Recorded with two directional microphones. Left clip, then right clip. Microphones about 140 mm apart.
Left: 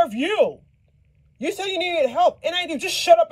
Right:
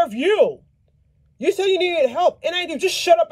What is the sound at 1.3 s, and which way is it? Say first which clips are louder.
Speech: right 6 dB; 20° right (ahead or behind).